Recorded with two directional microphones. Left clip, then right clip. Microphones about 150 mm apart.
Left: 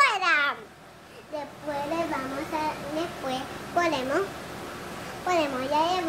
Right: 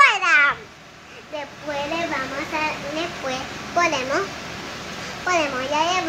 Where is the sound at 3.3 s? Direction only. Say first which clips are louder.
Right 4 dB; 25° left (ahead or behind).